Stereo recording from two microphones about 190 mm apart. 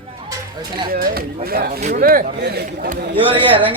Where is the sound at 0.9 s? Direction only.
50° right (ahead or behind).